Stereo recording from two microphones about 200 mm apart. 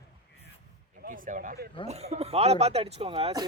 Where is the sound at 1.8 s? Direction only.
30° right (ahead or behind).